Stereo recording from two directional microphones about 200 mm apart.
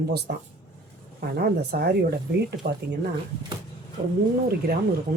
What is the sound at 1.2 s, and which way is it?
A woman's voice, 50° right (ahead or behind).